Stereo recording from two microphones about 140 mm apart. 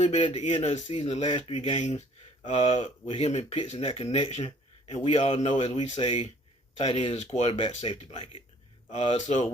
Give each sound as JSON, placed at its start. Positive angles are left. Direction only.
{"t": 0.0, "sound": "speech", "side_deg": 55}
{"t": 5.9, "sound": "speech", "side_deg": 35}
{"t": 6.7, "sound": "speech", "side_deg": 45}
{"t": 8.9, "sound": "speech", "side_deg": 50}